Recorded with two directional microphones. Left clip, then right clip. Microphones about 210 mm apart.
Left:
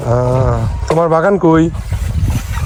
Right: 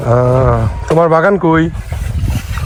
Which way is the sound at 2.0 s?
Centre (ahead or behind).